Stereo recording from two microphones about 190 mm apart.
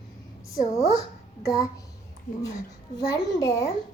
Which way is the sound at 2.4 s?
20° left (ahead or behind).